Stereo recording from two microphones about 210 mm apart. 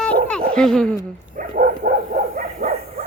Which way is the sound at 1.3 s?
40° right (ahead or behind).